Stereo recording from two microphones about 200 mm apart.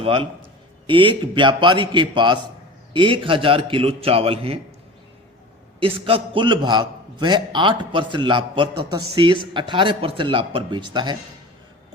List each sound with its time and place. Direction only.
0.0 s a man's voice: 25° right (ahead or behind)
5.8 s a man's voice: 25° right (ahead or behind)